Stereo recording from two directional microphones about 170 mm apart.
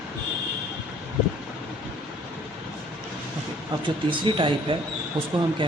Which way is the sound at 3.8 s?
30° right (ahead or behind).